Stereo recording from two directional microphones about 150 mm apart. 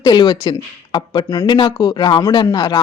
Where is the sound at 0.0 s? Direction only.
30° left (ahead or behind).